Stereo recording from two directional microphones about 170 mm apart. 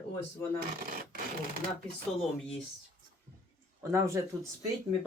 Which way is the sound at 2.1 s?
5° left (ahead or behind).